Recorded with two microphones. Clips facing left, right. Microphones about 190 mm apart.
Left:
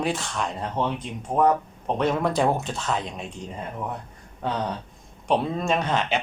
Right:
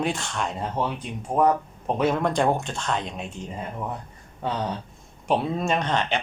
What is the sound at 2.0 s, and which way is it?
Speech, centre (ahead or behind).